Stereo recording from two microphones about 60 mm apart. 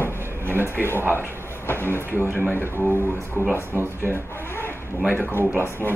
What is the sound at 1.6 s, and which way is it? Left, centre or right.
Speech, left.